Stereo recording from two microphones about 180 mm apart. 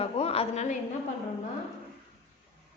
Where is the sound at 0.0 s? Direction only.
35° left (ahead or behind).